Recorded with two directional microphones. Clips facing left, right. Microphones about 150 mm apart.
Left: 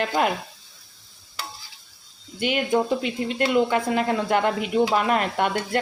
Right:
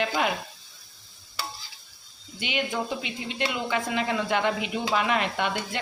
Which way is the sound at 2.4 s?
45° left (ahead or behind).